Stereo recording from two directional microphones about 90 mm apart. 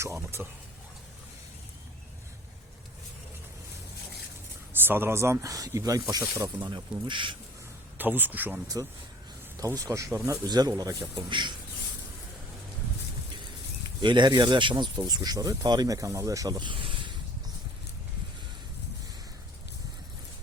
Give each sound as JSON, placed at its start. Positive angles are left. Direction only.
{"t": 0.0, "sound": "speech", "side_deg": -30}
{"t": 4.7, "sound": "speech", "side_deg": -25}
{"t": 6.6, "sound": "speech", "side_deg": -65}
{"t": 7.9, "sound": "speech", "side_deg": -20}
{"t": 8.6, "sound": "speech", "side_deg": -45}
{"t": 10.4, "sound": "speech", "side_deg": -50}
{"t": 11.3, "sound": "speech", "side_deg": -60}
{"t": 14.0, "sound": "speech", "side_deg": -60}
{"t": 16.6, "sound": "a sound", "side_deg": -65}